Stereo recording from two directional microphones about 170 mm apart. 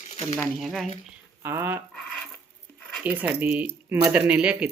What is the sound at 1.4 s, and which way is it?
Speech, 15° right (ahead or behind).